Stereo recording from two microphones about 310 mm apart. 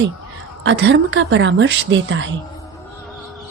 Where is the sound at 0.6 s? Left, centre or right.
Right.